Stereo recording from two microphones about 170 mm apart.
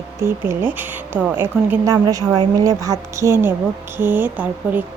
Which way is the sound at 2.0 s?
25° right (ahead or behind).